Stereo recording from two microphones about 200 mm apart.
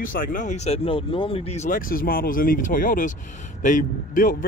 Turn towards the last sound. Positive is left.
turn(degrees=40)  # may be behind; listen again after turning